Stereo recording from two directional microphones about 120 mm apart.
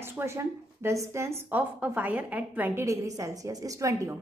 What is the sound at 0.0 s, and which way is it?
A woman's voice, 20° right (ahead or behind).